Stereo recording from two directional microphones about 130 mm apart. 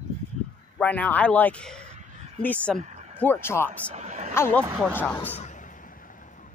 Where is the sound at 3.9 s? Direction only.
60° right (ahead or behind).